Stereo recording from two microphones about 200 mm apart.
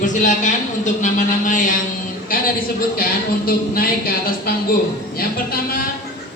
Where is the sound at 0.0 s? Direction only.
40° left (ahead or behind).